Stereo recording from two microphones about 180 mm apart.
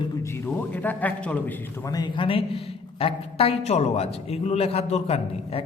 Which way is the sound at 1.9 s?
25° left (ahead or behind).